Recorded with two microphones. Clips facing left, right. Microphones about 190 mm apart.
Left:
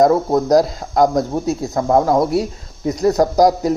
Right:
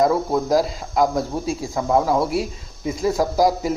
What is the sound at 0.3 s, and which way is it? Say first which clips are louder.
Speech: left 5 dB; 20° left (ahead or behind).